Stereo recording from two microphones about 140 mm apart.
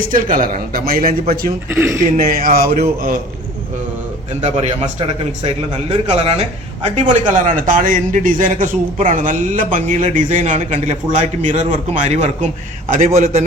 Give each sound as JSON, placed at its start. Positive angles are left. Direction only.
{"t": 0.1, "sound": "a man's voice", "side_deg": -75}
{"t": 1.7, "sound": "speech", "side_deg": -20}
{"t": 2.1, "sound": "a man's voice", "side_deg": -90}
{"t": 4.4, "sound": "speech", "side_deg": -55}
{"t": 6.8, "sound": "a man's voice", "side_deg": -60}